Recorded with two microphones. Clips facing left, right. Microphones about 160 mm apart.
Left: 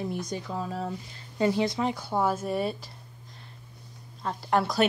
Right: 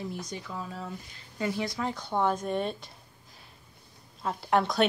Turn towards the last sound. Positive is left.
turn(degrees=0)  # may be behind; listen again after turning